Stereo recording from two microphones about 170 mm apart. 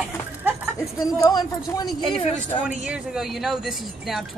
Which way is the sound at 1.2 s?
20° left (ahead or behind).